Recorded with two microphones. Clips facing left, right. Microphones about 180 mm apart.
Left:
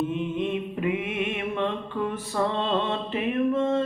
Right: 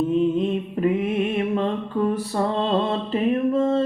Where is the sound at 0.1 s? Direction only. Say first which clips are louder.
Right 7 dB; 40° right (ahead or behind).